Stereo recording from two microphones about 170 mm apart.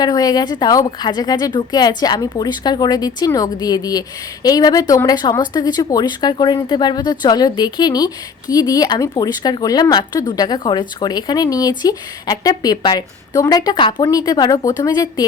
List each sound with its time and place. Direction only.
0.0 s speech: 20° left (ahead or behind)